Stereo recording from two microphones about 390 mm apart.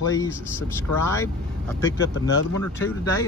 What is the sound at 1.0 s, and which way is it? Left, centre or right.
Speech, centre.